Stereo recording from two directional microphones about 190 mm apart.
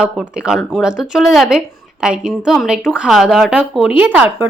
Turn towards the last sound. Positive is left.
turn(degrees=-10)  # may be behind; listen again after turning